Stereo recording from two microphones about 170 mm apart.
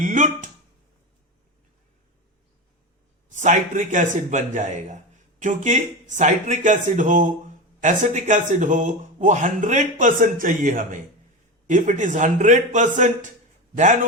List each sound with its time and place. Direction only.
0.0 s speech: 45° right (ahead or behind)
3.2 s speech: 45° right (ahead or behind)